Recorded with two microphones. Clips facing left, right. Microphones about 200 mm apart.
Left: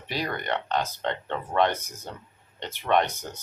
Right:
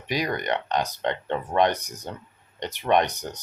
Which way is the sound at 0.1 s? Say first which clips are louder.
Right 3 dB; 15° right (ahead or behind).